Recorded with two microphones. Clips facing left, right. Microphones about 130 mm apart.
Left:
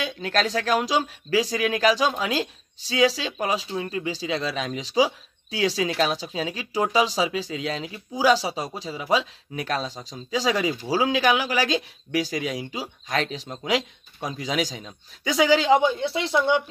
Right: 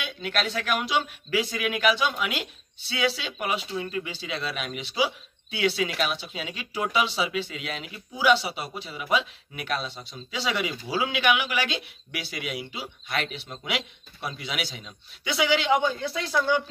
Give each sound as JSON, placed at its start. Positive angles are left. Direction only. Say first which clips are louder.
{"t": 0.0, "sound": "speech", "louder": "left 5 dB", "side_deg": 35}
{"t": 16.3, "sound": "speech", "louder": "left 3 dB", "side_deg": 25}